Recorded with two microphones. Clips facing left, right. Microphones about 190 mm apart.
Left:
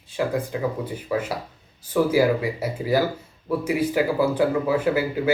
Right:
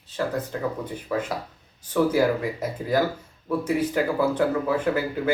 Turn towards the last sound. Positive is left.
turn(degrees=5)  # may be behind; listen again after turning